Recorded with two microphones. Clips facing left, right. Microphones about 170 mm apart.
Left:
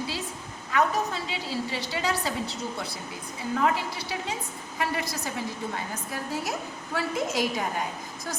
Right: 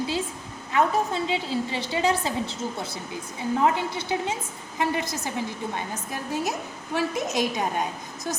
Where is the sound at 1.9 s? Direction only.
20° right (ahead or behind).